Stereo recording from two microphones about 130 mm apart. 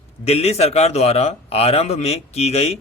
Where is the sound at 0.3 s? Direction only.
55° left (ahead or behind).